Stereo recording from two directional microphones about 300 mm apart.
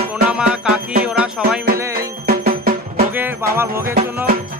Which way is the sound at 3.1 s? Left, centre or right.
Centre.